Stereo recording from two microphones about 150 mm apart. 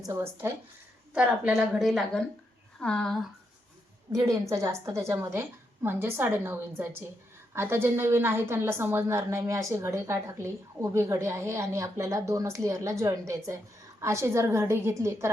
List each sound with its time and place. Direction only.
0.0 s a woman's voice: 20° right (ahead or behind)
1.1 s a woman's voice: 5° right (ahead or behind)
4.1 s a woman's voice: 20° right (ahead or behind)